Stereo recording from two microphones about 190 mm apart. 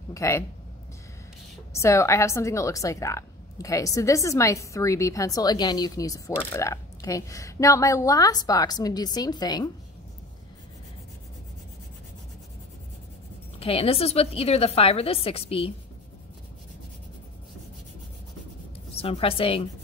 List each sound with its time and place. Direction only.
0.1 s a woman's voice: 15° left (ahead or behind)
1.7 s a woman's voice: 15° left (ahead or behind)
13.6 s a woman's voice: 30° left (ahead or behind)
18.9 s a woman's voice: 30° left (ahead or behind)